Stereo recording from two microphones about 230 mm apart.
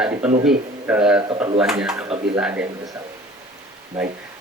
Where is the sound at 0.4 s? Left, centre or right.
Centre.